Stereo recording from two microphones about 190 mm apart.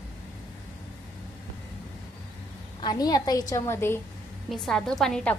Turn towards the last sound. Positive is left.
turn(degrees=5)  # may be behind; listen again after turning